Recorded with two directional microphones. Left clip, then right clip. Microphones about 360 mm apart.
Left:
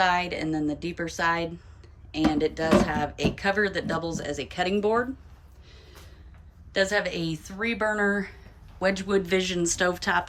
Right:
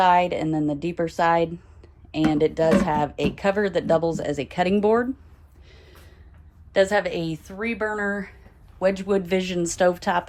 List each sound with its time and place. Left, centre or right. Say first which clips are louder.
0.0 s a woman's voice: right 6 dB; centre
5.6 s music: right 1 dB; centre
6.7 s a woman's voice: right 5 dB; centre